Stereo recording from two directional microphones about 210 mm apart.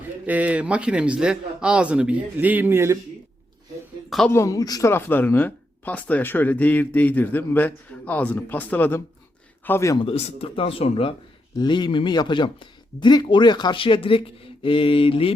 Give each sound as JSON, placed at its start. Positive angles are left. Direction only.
{"t": 0.3, "sound": "a man's voice", "side_deg": -5}
{"t": 4.1, "sound": "a man's voice", "side_deg": 0}
{"t": 4.4, "sound": "speech", "side_deg": 15}